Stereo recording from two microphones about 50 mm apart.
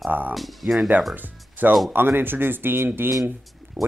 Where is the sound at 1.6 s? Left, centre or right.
Right.